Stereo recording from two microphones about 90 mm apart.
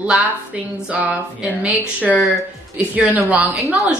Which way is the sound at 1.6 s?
15° right (ahead or behind).